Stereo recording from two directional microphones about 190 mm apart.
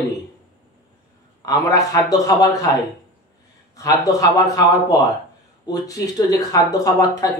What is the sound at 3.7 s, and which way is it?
A man's voice, 20° left (ahead or behind).